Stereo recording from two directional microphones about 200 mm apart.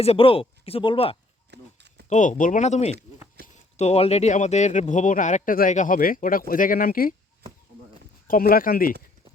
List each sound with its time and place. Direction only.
0.0 s speech: 30° left (ahead or behind)
1.5 s livestock: 55° right (ahead or behind)
2.0 s speech: 35° left (ahead or behind)
8.3 s speech: 45° left (ahead or behind)